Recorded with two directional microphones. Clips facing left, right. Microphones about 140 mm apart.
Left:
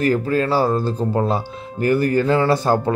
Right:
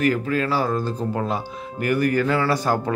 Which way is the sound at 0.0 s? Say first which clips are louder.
Left 3 dB; 35° left (ahead or behind).